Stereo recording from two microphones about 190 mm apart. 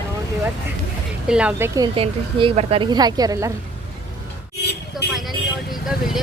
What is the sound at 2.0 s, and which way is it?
A woman's voice, 30° right (ahead or behind).